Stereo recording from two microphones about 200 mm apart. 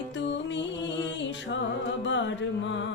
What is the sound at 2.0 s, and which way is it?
Music, 65° left (ahead or behind).